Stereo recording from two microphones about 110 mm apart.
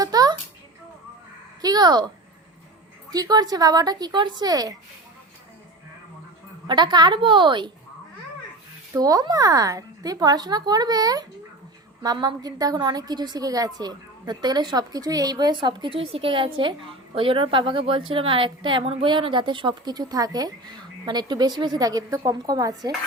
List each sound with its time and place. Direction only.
0.0 s a sound: 35° right (ahead or behind)
1.6 s speech: 40° right (ahead or behind)
3.1 s a woman's voice: 35° right (ahead or behind)
6.7 s a woman's voice: 45° right (ahead or behind)
8.9 s a woman's voice: 35° right (ahead or behind)